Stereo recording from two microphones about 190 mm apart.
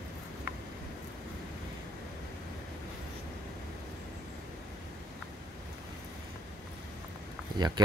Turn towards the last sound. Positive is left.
turn(degrees=-20)  # may be behind; listen again after turning